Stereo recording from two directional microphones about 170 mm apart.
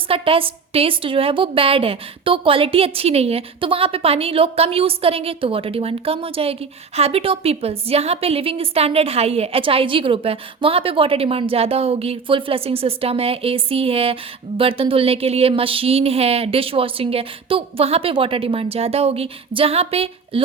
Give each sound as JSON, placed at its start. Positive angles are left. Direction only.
{"t": 0.1, "sound": "a woman's voice", "side_deg": -35}